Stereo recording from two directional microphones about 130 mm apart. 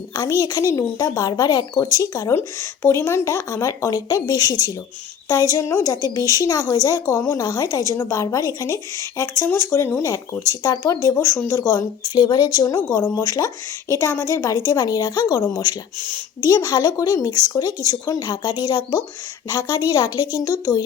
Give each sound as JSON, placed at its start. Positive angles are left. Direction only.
{"t": 0.1, "sound": "a woman's voice", "side_deg": 30}
{"t": 16.0, "sound": "a woman's voice", "side_deg": 15}
{"t": 16.5, "sound": "a woman's voice", "side_deg": 30}